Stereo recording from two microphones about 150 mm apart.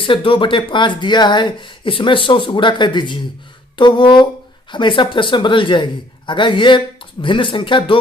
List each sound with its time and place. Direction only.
0.0 s a man's voice: 35° left (ahead or behind)